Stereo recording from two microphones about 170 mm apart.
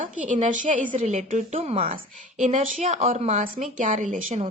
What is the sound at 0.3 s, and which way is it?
A woman's voice, 50° right (ahead or behind).